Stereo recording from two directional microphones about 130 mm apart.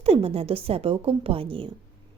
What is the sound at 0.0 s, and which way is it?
A woman's voice, 50° right (ahead or behind).